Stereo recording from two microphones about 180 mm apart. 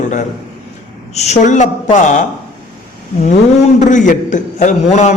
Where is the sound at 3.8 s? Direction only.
45° left (ahead or behind).